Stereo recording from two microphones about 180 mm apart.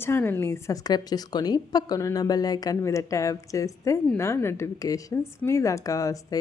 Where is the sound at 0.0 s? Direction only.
15° left (ahead or behind).